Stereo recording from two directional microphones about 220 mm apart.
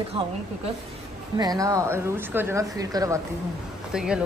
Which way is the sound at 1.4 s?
15° right (ahead or behind).